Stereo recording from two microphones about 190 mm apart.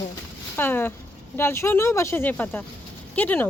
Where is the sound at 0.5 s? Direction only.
10° left (ahead or behind).